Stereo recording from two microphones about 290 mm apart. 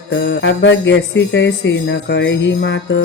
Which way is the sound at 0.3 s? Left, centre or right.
Left.